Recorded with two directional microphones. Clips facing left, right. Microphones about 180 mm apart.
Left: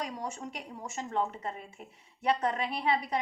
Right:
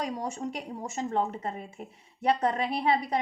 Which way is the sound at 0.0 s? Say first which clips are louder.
Right 5 dB; 35° right (ahead or behind).